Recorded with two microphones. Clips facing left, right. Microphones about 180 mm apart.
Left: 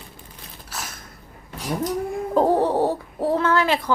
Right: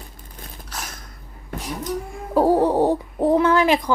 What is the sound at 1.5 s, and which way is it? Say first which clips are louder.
Cat: right 3 dB; 55° right (ahead or behind).